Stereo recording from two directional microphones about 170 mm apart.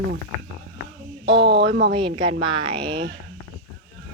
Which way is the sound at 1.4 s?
80° right.